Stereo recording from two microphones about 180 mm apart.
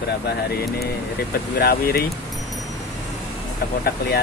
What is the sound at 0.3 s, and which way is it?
Speech, 60° left (ahead or behind).